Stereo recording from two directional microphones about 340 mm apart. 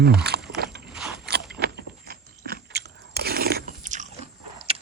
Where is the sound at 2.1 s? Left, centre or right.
Right.